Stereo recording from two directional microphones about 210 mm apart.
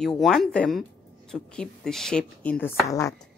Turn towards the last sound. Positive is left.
turn(degrees=15)  # may be behind; listen again after turning